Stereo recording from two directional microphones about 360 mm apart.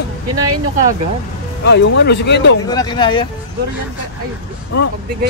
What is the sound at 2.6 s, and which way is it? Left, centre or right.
Speech, centre.